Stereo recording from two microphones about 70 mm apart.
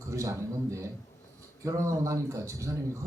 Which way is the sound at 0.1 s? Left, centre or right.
Right.